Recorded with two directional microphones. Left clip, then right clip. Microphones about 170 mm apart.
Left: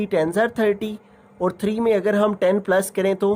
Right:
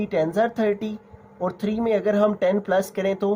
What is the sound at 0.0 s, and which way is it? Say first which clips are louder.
Speech: left 2 dB; 40° left (ahead or behind).